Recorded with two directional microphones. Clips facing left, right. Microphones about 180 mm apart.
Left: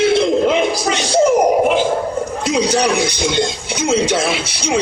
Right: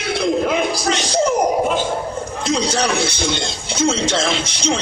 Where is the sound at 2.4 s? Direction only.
10° left (ahead or behind).